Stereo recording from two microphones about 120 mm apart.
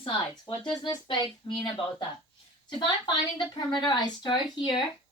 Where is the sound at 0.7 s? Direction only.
40° left (ahead or behind).